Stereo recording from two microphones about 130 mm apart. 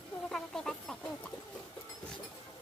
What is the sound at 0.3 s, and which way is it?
Music, 5° left (ahead or behind).